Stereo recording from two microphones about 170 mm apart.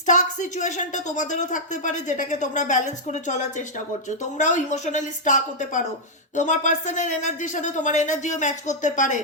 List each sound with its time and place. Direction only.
0.0 s a woman's voice: 45° left (ahead or behind)